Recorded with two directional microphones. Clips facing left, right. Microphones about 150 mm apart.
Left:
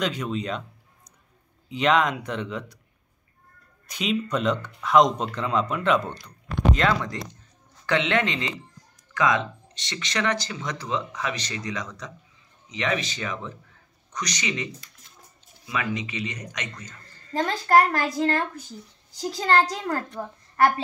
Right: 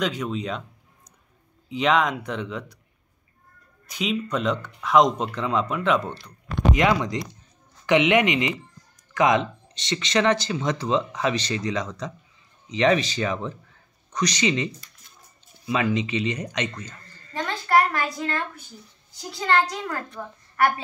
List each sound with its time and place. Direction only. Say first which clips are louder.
0.0 s speech: right 1 dB; centre (ahead or behind)
1.7 s speech: even; centre (ahead or behind)
3.9 s speech: even; centre (ahead or behind)
6.7 s a man's voice: right 3 dB; 15° right (ahead or behind)
17.3 s a sound: left 2 dB; 40° left (ahead or behind)
19.1 s a child's voice: left 1 dB; 35° left (ahead or behind)